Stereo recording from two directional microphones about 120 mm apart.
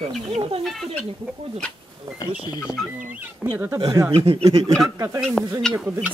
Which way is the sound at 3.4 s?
15° right (ahead or behind).